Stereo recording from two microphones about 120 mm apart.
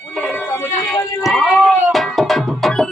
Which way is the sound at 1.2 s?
Centre (ahead or behind).